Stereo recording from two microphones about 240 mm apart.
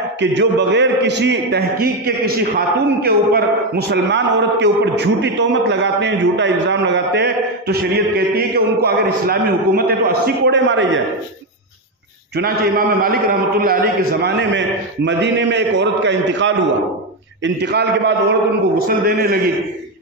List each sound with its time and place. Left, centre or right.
0.2 s a man's voice: right
12.4 s a man's voice: right